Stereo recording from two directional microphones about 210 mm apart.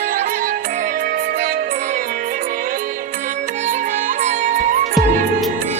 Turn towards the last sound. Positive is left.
turn(degrees=-40)  # may be behind; listen again after turning